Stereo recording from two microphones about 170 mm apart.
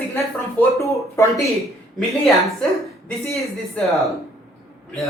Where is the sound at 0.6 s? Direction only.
20° left (ahead or behind).